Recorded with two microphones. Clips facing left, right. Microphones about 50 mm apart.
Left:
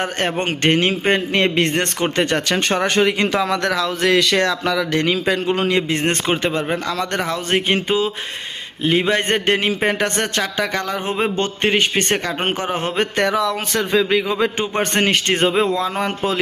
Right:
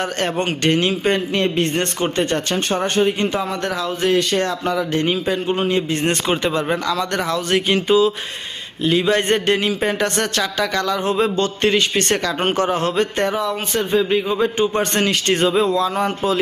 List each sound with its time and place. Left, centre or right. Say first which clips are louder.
0.0 s a man's voice: even; left
13.5 s speech: even; left
14.7 s a man's voice: left 1 dB; left